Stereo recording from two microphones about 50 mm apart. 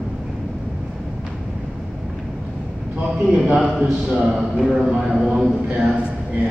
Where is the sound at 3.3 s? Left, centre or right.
Right.